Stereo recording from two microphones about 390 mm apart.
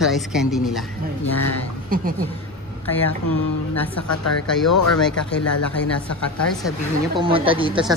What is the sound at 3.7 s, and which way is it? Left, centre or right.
Speech, centre.